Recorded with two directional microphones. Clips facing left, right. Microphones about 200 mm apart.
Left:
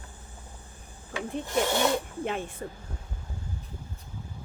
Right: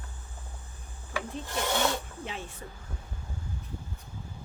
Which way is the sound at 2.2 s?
55° left (ahead or behind).